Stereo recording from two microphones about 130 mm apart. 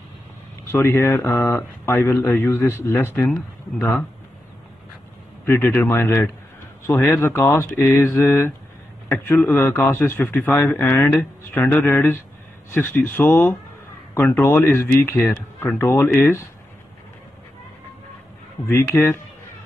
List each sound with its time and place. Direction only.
0.7 s speech: 20° left (ahead or behind)
3.3 s speech: 5° left (ahead or behind)
5.4 s a man's voice: 15° left (ahead or behind)
18.7 s speech: 20° left (ahead or behind)